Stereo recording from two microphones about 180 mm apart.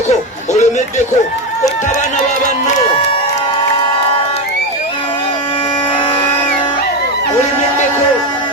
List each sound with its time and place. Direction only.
0.1 s chatter: 40° left (ahead or behind)